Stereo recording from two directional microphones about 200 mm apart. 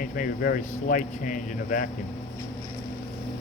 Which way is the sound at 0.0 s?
45° left (ahead or behind).